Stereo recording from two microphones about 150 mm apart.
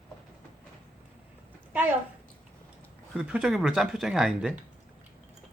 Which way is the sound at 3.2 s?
5° right (ahead or behind).